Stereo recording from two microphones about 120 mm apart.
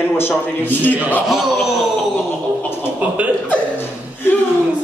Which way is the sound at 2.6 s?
20° left (ahead or behind).